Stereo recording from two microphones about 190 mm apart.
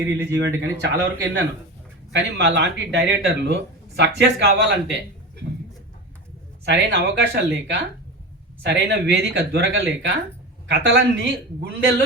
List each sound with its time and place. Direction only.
0.0 s speech: 15° right (ahead or behind)
0.3 s speech: 65° right (ahead or behind)
6.7 s speech: 60° right (ahead or behind)
8.6 s speech: 60° right (ahead or behind)